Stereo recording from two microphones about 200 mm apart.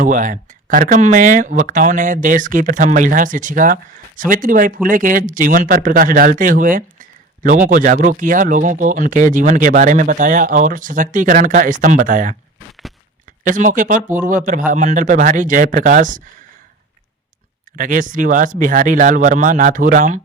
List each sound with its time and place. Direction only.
0.0 s speech: 40° right (ahead or behind)
13.4 s speech: 40° right (ahead or behind)
17.7 s speech: 40° right (ahead or behind)